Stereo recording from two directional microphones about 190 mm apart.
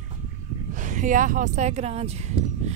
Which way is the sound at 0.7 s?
40° right (ahead or behind).